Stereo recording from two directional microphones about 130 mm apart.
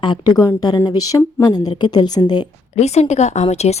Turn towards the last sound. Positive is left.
turn(degrees=55)  # may be behind; listen again after turning